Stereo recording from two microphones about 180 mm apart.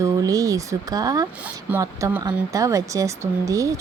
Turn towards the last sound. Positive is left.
turn(degrees=-20)  # may be behind; listen again after turning